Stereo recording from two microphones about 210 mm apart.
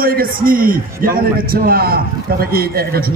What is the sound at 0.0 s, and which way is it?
A man's voice, 45° right (ahead or behind).